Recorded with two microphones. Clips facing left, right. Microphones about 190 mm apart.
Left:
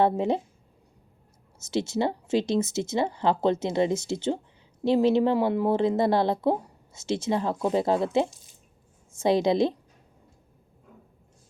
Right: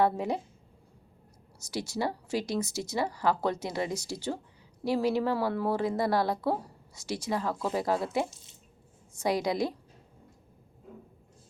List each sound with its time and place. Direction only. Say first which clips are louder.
0.0 s speech: left 4 dB; 25° left (ahead or behind)
1.5 s speech: left 7 dB; 25° left (ahead or behind)